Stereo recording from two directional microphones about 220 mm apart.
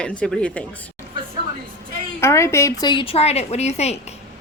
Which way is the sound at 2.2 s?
10° left (ahead or behind).